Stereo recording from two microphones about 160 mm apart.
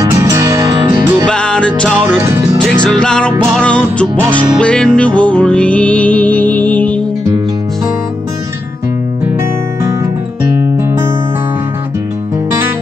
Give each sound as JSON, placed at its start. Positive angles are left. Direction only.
{"t": 0.0, "sound": "music", "side_deg": -20}
{"t": 1.2, "sound": "music", "side_deg": 5}
{"t": 2.0, "sound": "music", "side_deg": -15}
{"t": 2.6, "sound": "music", "side_deg": 5}